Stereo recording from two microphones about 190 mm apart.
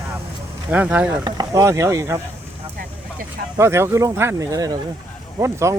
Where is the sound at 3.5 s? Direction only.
15° right (ahead or behind).